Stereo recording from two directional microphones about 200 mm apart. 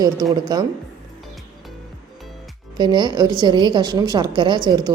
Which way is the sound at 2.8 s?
20° right (ahead or behind).